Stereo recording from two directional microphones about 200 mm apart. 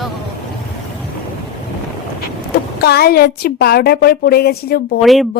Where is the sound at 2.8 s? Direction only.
50° left (ahead or behind).